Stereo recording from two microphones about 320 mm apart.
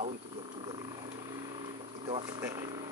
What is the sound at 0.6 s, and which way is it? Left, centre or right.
Wild animals, centre.